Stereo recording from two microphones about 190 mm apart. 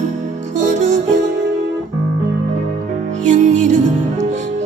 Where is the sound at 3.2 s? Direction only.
40° right (ahead or behind).